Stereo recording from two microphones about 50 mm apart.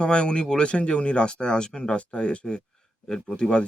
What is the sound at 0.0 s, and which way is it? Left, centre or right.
Speech, centre.